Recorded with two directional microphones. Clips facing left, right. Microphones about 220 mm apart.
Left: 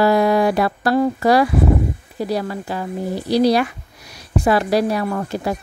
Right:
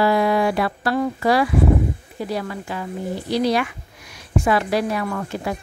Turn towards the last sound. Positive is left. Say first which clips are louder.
# left 3 dB
turn(degrees=35)  # may be behind; listen again after turning